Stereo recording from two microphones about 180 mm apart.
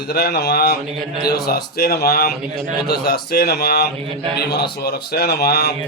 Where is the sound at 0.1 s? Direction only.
65° left (ahead or behind).